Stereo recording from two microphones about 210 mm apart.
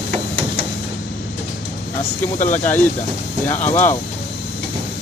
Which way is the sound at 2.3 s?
35° left (ahead or behind).